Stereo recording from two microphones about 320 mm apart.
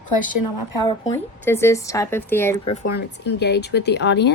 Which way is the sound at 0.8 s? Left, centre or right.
Centre.